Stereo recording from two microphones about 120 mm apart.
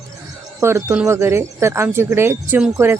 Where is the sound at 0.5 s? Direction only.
25° right (ahead or behind).